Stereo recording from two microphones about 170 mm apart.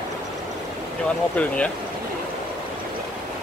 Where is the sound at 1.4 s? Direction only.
10° left (ahead or behind).